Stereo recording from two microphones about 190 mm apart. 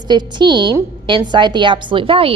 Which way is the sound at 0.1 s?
25° right (ahead or behind).